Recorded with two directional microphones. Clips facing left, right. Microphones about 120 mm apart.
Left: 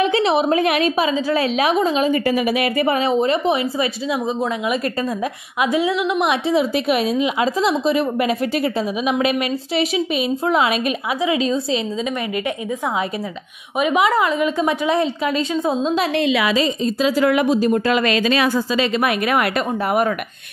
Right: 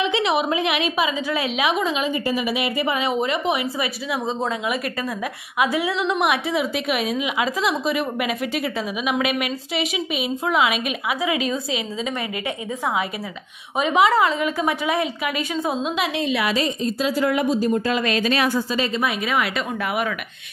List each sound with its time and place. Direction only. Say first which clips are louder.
0.0 s a sound: left 4 dB; 40° left (ahead or behind)
0.5 s a woman's voice: left 5 dB; 45° left (ahead or behind)
2.2 s a woman's voice: left 5 dB; 50° left (ahead or behind); by 4.2 s 30° left (ahead or behind)
5.6 s a woman's voice: left 3 dB; 25° left (ahead or behind)
11.2 s a woman's voice: left 6 dB; 25° left (ahead or behind)
13.9 s a woman's voice: right 1 dB; 15° left (ahead or behind)
16.2 s a woman's voice: left 3 dB; 90° left
18.8 s a woman's voice: left 4 dB; 65° left (ahead or behind); by 20.2 s 40° left (ahead or behind)